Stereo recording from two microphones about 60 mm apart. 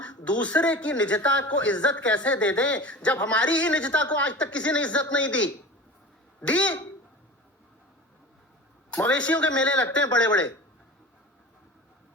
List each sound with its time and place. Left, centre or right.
0.0 s speech: centre
8.9 s speech: left